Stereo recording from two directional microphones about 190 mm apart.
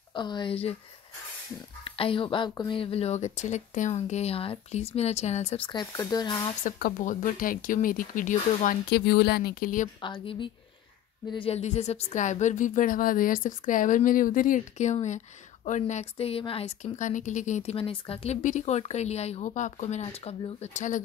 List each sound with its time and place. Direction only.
0.1 s speech: 25° left (ahead or behind)
1.9 s speech: 30° left (ahead or behind)
6.6 s speech: 40° left (ahead or behind)
8.9 s speech: 60° left (ahead or behind)
10.0 s speech: 25° left (ahead or behind)